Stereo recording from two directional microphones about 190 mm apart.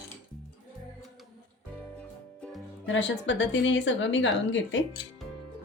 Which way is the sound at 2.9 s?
70° left (ahead or behind).